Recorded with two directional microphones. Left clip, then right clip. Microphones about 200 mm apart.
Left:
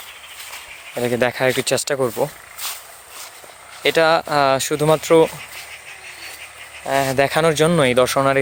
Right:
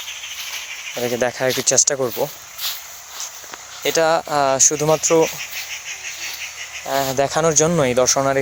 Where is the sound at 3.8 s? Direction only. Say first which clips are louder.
Left 2 dB; 25° left (ahead or behind).